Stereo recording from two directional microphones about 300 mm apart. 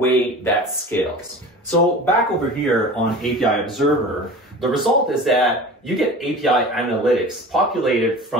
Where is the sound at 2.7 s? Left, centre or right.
Centre.